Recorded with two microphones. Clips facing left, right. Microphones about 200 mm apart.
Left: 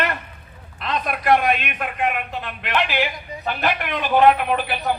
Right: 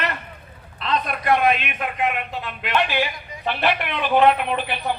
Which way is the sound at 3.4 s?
45° left (ahead or behind).